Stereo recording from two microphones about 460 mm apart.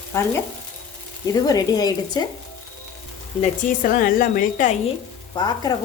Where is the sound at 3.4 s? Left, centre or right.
Centre.